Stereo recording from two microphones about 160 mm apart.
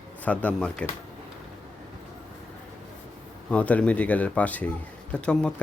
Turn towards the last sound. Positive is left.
turn(degrees=5)  # may be behind; listen again after turning